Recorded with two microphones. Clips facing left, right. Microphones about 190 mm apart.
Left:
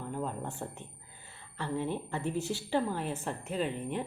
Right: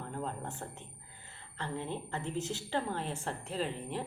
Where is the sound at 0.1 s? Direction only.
10° left (ahead or behind).